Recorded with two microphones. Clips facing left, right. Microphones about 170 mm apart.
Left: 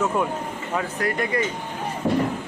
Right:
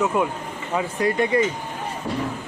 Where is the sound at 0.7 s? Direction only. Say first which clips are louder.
Right 4 dB; 20° right (ahead or behind).